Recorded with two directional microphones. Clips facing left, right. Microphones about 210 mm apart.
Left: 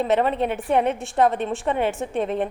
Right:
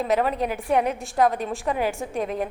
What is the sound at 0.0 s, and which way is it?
A woman's voice, centre (ahead or behind).